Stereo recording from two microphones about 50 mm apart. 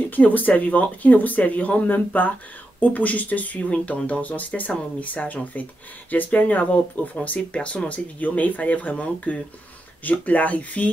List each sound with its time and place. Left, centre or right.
0.1 s speech: left